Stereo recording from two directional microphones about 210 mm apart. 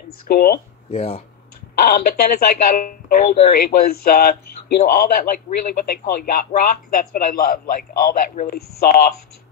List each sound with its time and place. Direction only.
0.3 s a man's voice: 45° left (ahead or behind)
0.8 s speech: 30° left (ahead or behind)
1.9 s a man's voice: 45° left (ahead or behind)